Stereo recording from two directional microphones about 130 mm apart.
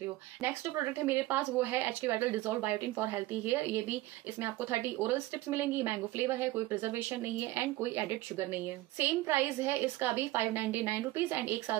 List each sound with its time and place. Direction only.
1.0 s speech: 15° right (ahead or behind)